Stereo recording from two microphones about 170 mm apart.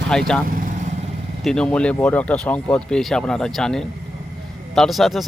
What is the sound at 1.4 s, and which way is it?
Speech, 5° left (ahead or behind).